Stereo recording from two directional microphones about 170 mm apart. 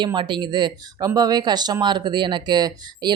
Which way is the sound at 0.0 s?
25° right (ahead or behind).